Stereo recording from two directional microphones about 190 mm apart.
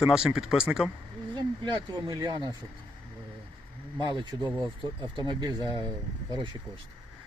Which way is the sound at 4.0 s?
25° right (ahead or behind).